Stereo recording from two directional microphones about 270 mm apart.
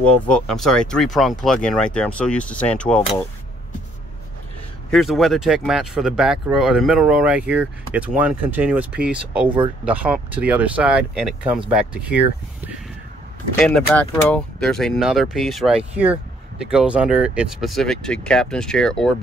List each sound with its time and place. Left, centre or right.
0.3 s speech: centre
4.9 s speech: centre